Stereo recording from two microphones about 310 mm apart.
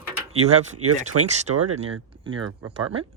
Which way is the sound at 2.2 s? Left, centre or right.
Centre.